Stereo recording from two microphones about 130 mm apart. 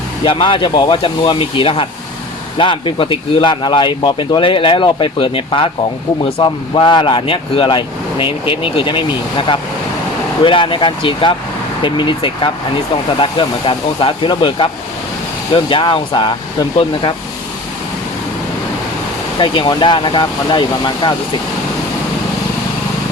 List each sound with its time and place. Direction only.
0.3 s speech: 40° left (ahead or behind)
10.4 s speech: 40° left (ahead or behind)
19.4 s speech: 40° left (ahead or behind)